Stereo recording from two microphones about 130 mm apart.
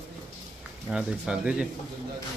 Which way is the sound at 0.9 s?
5° right (ahead or behind).